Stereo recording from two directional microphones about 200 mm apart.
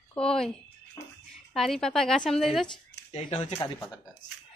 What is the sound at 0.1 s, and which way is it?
Speech, 5° left (ahead or behind).